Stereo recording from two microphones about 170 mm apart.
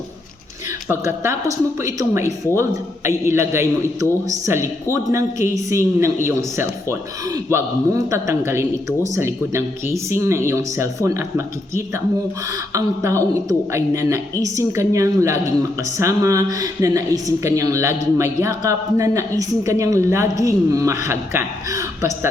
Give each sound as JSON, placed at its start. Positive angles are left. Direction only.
{"t": 0.9, "sound": "a woman's voice", "side_deg": -15}